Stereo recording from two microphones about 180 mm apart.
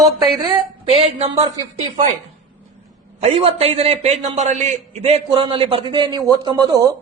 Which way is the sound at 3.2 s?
35° right (ahead or behind).